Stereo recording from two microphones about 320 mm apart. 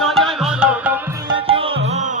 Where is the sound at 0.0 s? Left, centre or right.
Centre.